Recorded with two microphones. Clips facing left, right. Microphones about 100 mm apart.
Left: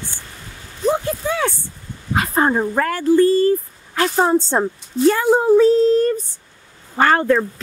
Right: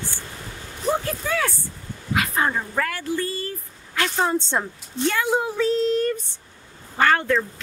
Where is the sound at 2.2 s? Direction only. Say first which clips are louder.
Left 6 dB; 40° left (ahead or behind).